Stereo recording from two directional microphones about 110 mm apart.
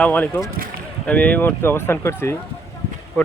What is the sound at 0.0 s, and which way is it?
Speech, 15° left (ahead or behind).